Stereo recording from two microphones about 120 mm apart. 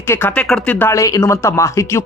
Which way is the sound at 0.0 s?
20° left (ahead or behind).